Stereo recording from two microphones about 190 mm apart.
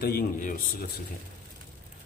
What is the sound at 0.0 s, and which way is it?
Speech, 50° left (ahead or behind).